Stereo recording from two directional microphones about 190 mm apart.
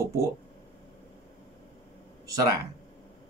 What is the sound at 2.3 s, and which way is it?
Speech, 20° right (ahead or behind).